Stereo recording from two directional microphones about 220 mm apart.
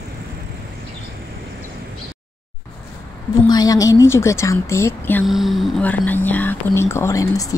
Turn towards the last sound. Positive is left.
turn(degrees=15)  # may be behind; listen again after turning